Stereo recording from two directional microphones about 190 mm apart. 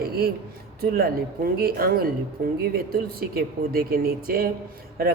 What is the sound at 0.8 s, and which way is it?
Speech, 55° right (ahead or behind).